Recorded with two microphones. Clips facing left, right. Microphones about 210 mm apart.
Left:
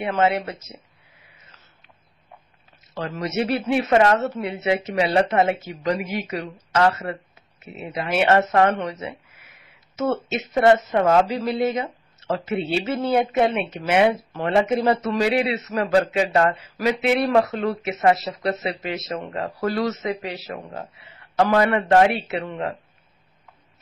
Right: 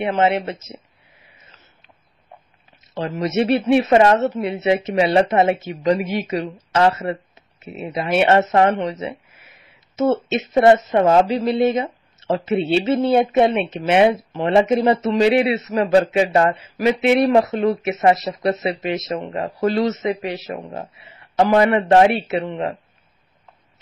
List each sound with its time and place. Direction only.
0.0 s speech: 25° right (ahead or behind)
2.9 s speech: 20° right (ahead or behind)